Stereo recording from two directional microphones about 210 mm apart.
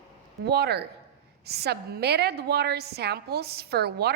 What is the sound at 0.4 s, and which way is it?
A woman's voice, 50° right (ahead or behind).